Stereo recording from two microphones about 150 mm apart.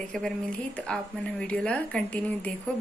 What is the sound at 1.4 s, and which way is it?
Speech, 5° left (ahead or behind).